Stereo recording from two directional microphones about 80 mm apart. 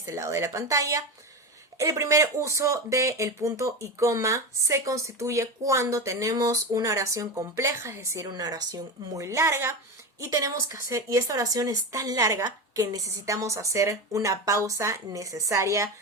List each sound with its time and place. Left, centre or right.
0.0 s speech: right
8.3 s a woman's voice: right